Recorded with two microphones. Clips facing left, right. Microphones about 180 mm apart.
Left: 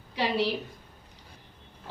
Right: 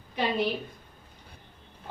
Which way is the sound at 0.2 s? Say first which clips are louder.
Even; 80° left.